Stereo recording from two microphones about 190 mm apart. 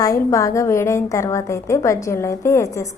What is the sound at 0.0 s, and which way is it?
A woman's voice, 15° left (ahead or behind).